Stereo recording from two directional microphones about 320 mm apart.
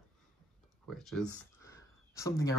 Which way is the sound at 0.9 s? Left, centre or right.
Centre.